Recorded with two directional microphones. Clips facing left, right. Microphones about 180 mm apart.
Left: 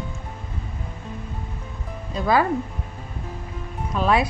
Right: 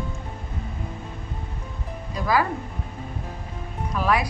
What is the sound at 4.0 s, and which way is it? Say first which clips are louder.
Speech: left 3 dB; 25° left (ahead or behind).